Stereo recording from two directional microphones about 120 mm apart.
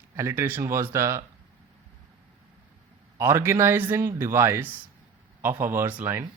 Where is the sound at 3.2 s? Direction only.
20° right (ahead or behind).